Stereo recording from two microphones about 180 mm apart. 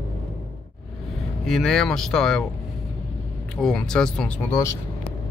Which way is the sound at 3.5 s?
5° left (ahead or behind).